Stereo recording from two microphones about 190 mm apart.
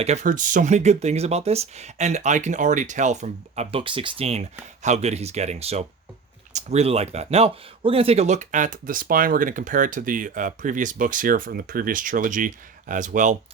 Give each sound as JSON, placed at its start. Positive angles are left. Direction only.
{"t": 0.0, "sound": "speech", "side_deg": -40}